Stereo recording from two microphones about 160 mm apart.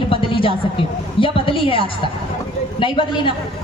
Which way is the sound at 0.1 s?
35° left (ahead or behind).